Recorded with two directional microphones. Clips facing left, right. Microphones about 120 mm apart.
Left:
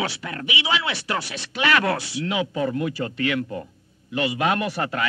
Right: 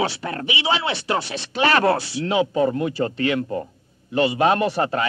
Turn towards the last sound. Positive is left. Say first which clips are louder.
# right 5 dB
turn(degrees=-30)  # may be behind; listen again after turning